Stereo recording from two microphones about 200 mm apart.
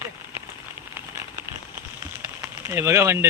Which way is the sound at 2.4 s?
10° right (ahead or behind).